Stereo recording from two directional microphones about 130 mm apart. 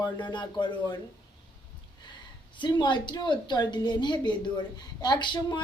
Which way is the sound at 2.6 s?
35° left (ahead or behind).